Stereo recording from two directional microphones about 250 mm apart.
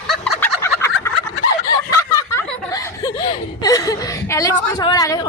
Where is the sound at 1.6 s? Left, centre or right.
Centre.